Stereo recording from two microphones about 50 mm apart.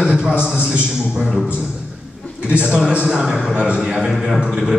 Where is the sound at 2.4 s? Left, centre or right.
Right.